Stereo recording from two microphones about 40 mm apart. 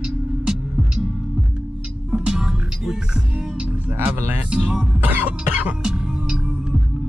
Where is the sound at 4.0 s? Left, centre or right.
Right.